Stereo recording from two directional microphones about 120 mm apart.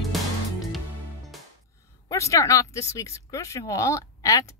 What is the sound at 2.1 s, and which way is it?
Speech, 25° left (ahead or behind).